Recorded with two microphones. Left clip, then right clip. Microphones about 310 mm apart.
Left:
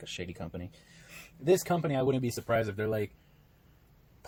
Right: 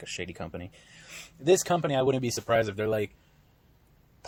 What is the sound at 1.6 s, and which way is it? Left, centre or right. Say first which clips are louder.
Speech: right 4 dB; right.